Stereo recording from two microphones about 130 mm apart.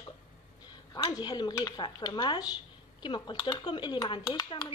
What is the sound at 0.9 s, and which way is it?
Speech, 35° left (ahead or behind).